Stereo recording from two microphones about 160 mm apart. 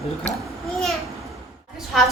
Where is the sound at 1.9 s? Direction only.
Centre (ahead or behind).